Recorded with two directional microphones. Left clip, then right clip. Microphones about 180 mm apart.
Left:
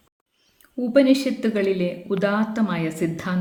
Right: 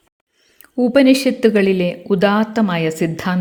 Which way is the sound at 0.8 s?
50° right (ahead or behind).